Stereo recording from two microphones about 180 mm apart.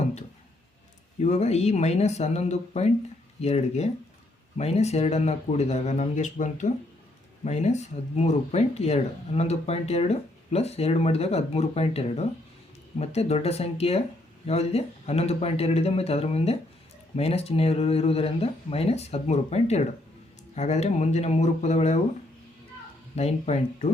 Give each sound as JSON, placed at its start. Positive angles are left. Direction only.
{"t": 1.2, "sound": "speech", "side_deg": 40}
{"t": 23.1, "sound": "speech", "side_deg": 40}